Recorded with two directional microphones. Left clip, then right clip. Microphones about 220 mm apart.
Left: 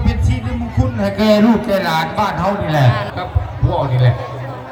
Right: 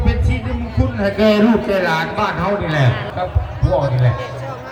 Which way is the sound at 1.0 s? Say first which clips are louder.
Left 1 dB; 55° left (ahead or behind).